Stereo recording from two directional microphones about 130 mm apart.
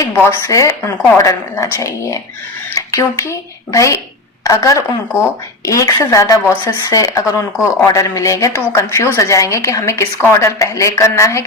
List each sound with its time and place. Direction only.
0.2 s speech: 20° left (ahead or behind)